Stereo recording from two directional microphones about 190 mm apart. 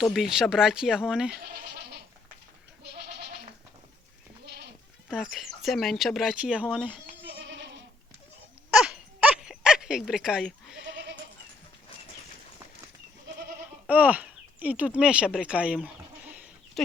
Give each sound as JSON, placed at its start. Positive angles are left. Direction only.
{"t": 0.0, "sound": "speech", "side_deg": 0}
{"t": 5.0, "sound": "speech", "side_deg": 0}
{"t": 7.1, "sound": "goat", "side_deg": -55}
{"t": 8.7, "sound": "a sound", "side_deg": -5}
{"t": 10.8, "sound": "goat", "side_deg": -70}
{"t": 13.8, "sound": "speech", "side_deg": -10}
{"t": 16.8, "sound": "a sound", "side_deg": 0}